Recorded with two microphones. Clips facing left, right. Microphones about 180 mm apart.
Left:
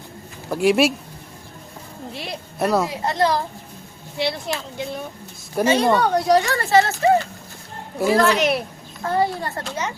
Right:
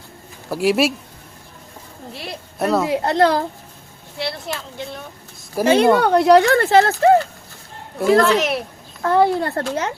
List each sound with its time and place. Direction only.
0.5 s speech: centre (ahead or behind)
2.1 s a sound: centre (ahead or behind)
2.9 s speech: 65° right (ahead or behind)
4.2 s speech: centre (ahead or behind)
5.7 s speech: 60° right (ahead or behind)
7.9 s speech: centre (ahead or behind)
9.0 s speech: 65° right (ahead or behind)